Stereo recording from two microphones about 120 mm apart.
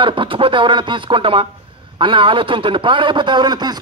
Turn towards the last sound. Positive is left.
turn(degrees=-35)  # may be behind; listen again after turning